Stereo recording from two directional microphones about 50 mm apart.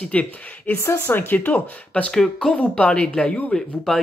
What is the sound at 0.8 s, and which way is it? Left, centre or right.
Speech, left.